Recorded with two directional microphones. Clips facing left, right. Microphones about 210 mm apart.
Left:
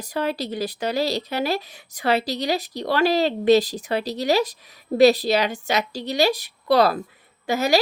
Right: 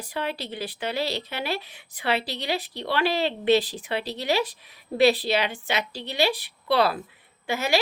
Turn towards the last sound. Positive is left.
turn(degrees=40)  # may be behind; listen again after turning